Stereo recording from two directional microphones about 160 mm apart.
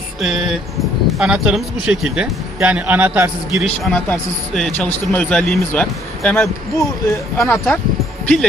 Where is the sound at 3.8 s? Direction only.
5° left (ahead or behind).